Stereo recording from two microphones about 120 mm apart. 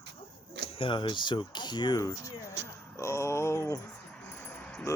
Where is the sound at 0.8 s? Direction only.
40° left (ahead or behind).